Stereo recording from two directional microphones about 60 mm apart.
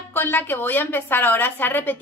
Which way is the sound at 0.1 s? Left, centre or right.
Left.